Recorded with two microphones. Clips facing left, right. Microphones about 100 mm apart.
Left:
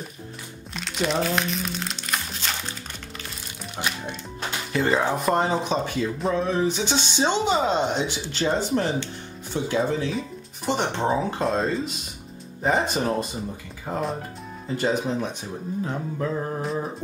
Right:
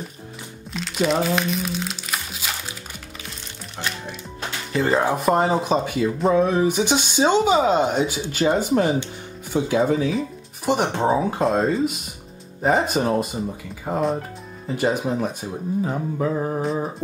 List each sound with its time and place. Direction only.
0.7 s speech: centre (ahead or behind)
3.8 s speech: 15° left (ahead or behind)
4.7 s speech: centre (ahead or behind)